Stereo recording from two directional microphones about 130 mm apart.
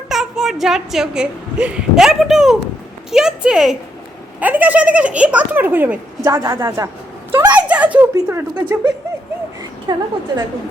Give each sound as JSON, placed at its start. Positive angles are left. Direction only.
{"t": 0.1, "sound": "a woman's voice", "side_deg": -5}
{"t": 6.2, "sound": "a woman's voice", "side_deg": -25}
{"t": 7.5, "sound": "a sound", "side_deg": -10}
{"t": 8.1, "sound": "speech", "side_deg": -20}
{"t": 9.8, "sound": "a woman's voice", "side_deg": -35}